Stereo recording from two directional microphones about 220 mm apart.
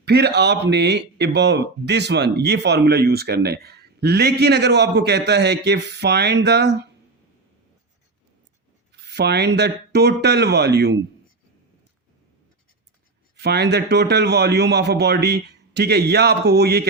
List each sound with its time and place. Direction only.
0.0 s speech: 50° right (ahead or behind)
9.0 s speech: 50° right (ahead or behind)
13.3 s speech: 50° right (ahead or behind)